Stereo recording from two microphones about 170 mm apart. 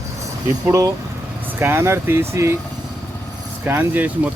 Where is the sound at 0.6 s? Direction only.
20° right (ahead or behind).